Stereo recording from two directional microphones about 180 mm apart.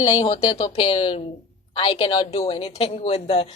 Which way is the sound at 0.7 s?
35° left (ahead or behind).